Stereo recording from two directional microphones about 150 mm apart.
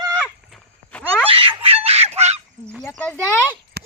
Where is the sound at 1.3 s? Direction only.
35° right (ahead or behind).